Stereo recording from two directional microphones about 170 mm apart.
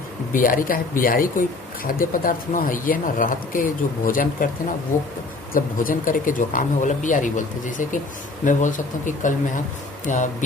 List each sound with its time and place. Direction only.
0.3 s speech: 55° left (ahead or behind)
5.5 s speech: 55° left (ahead or behind)